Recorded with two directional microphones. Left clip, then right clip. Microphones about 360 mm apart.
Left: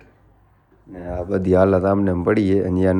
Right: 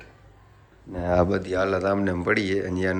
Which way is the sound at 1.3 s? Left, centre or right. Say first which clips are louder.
Left 8 dB; centre.